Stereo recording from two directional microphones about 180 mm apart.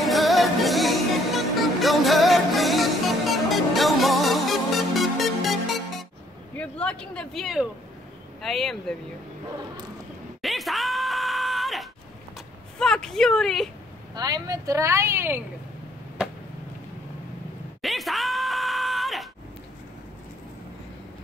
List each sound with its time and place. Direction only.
0.0 s music: centre (ahead or behind)
6.5 s a sound: 5° left (ahead or behind)
8.4 s speech: centre (ahead or behind)
10.4 s groan: centre (ahead or behind)
12.7 s speech: 5° left (ahead or behind)
14.1 s speech: 20° right (ahead or behind)
17.8 s groan: centre (ahead or behind)